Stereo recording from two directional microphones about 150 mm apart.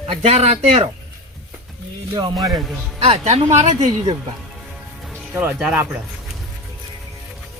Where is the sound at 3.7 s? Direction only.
25° right (ahead or behind).